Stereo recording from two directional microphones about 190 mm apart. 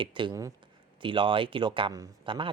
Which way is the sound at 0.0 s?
25° right (ahead or behind).